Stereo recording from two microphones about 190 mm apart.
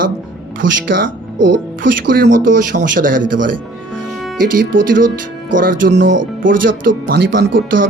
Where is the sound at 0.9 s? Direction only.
85° right.